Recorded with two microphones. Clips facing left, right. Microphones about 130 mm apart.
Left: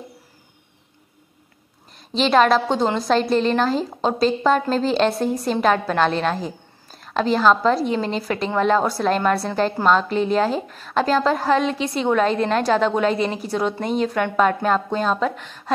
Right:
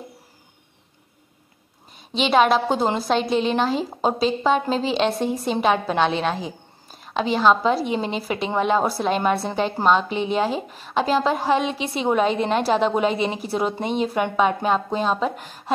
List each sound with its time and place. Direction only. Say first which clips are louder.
2.0 s a woman's voice: left 1 dB; 5° right (ahead or behind)
3.9 s a woman's voice: even; 20° right (ahead or behind)
4.4 s a woman's voice: left 2 dB; 5° right (ahead or behind)
15.3 s a woman's voice: even; 40° right (ahead or behind)